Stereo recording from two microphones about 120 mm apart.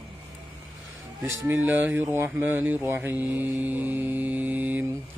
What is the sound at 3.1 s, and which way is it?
Mantra, 30° left (ahead or behind).